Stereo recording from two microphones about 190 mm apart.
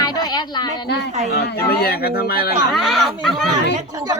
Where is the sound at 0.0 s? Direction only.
20° left (ahead or behind).